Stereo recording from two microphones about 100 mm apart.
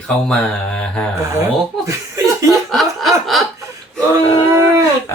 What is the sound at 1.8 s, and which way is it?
Chuckle, 30° right (ahead or behind).